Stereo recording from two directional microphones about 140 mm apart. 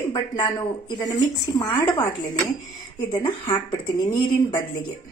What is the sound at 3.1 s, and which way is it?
A woman's voice, 35° left (ahead or behind).